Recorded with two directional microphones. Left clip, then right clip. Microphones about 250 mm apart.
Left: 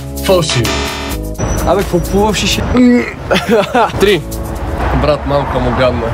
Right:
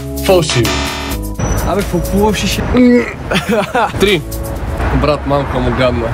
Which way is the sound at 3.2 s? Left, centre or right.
Left.